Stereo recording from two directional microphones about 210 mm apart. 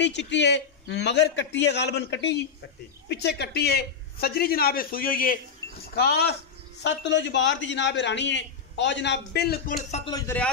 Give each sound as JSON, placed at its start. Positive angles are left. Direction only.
{"t": 0.0, "sound": "a man's voice", "side_deg": 55}
{"t": 9.8, "sound": "speech", "side_deg": 30}
{"t": 10.1, "sound": "a man's voice", "side_deg": 10}